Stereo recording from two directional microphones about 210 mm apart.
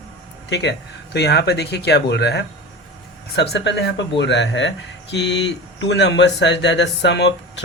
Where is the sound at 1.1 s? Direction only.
50° left (ahead or behind).